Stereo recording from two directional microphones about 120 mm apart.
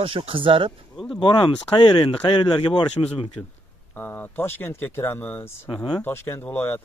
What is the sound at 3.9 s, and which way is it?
Speech, 15° left (ahead or behind).